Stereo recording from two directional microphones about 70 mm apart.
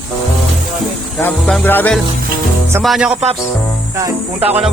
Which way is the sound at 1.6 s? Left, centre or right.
Left.